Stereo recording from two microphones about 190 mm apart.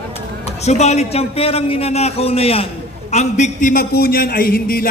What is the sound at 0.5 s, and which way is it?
A man's voice, 35° left (ahead or behind).